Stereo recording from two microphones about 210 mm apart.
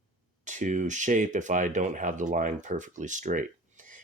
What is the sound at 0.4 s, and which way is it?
Speech, 35° right (ahead or behind).